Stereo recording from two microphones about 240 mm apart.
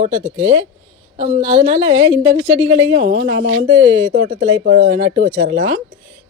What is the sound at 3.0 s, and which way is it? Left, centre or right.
Speech, right.